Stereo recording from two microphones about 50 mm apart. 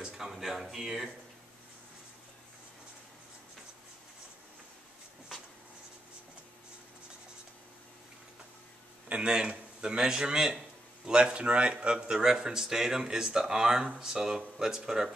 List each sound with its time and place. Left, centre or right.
0.0 s a sound: centre
0.3 s speech: centre
9.1 s speech: centre